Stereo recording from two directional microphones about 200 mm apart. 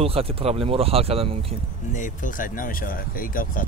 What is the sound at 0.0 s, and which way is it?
Speech, 30° right (ahead or behind).